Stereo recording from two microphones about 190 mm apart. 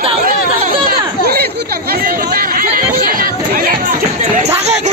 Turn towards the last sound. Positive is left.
turn(degrees=-45)  # may be behind; listen again after turning